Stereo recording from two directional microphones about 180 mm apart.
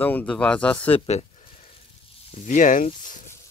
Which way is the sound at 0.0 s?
10° left (ahead or behind).